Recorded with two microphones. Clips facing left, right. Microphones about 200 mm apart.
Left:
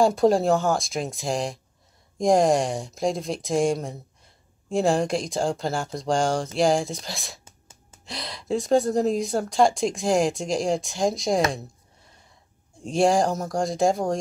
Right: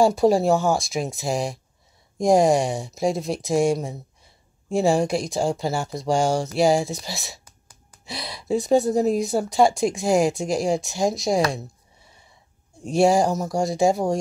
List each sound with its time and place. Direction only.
0.0 s speech: centre (ahead or behind)
7.4 s a sound: 25° left (ahead or behind)
8.0 s speech: 5° right (ahead or behind)
12.8 s speech: 5° right (ahead or behind)